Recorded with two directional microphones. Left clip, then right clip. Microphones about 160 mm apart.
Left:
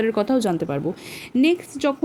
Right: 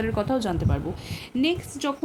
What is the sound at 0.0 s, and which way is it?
Speech, 35° left (ahead or behind).